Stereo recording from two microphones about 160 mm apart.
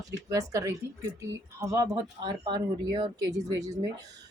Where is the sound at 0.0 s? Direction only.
20° right (ahead or behind).